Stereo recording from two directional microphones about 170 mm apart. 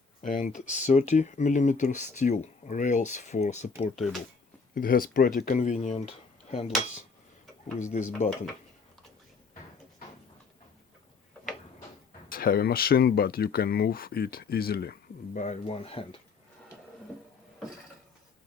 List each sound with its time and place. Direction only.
0.2 s speech: 50° left (ahead or behind)
4.7 s speech: 55° left (ahead or behind); by 6.7 s 40° left (ahead or behind)
7.8 s speech: 45° left (ahead or behind)
12.3 s speech: 60° left (ahead or behind)
15.4 s speech: 40° left (ahead or behind)